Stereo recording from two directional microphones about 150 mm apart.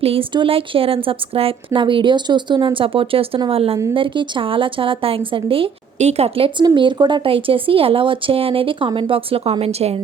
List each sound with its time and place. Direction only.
0.0 s a woman's voice: 40° right (ahead or behind)